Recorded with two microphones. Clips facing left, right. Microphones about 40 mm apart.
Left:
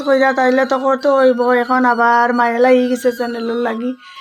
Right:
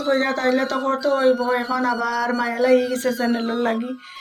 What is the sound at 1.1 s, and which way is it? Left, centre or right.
Speech, left.